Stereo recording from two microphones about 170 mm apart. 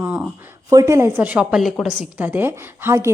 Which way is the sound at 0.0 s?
10° right (ahead or behind).